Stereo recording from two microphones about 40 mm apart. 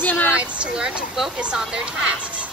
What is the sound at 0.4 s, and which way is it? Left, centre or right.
Speech, right.